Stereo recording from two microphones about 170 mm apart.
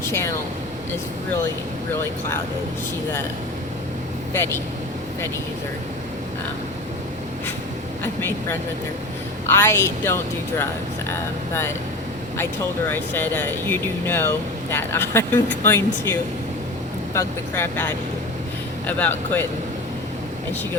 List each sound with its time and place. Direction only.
0.0 s speech: 15° left (ahead or behind)
8.0 s speech: 15° left (ahead or behind)
12.9 s speech: 10° left (ahead or behind)
17.2 s speech: 15° left (ahead or behind)